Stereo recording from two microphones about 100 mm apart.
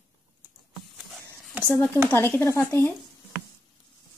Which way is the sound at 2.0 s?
20° left (ahead or behind).